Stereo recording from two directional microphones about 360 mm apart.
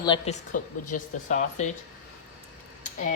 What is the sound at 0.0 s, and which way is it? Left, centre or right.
Cutlery, centre.